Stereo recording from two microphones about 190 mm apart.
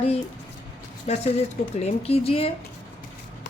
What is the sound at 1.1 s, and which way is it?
A woman's voice, 35° left (ahead or behind).